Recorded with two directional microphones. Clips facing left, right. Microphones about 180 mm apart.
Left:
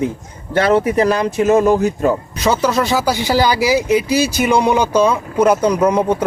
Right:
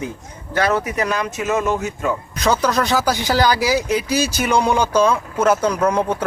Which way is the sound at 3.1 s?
15° left (ahead or behind).